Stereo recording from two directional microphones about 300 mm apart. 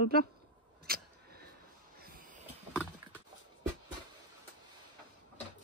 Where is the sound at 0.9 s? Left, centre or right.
Right.